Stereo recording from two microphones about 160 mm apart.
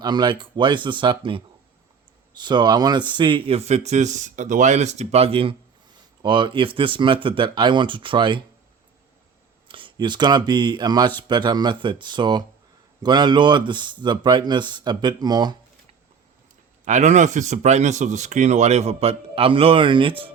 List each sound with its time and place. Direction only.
0.0 s speech: 30° right (ahead or behind)
9.6 s speech: 30° right (ahead or behind)
16.8 s speech: 45° right (ahead or behind)